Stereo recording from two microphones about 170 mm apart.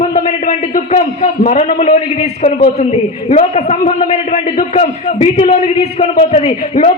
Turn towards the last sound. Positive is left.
turn(degrees=40)  # may be behind; listen again after turning